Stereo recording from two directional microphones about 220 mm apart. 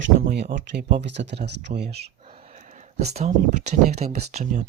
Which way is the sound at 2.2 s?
25° right (ahead or behind).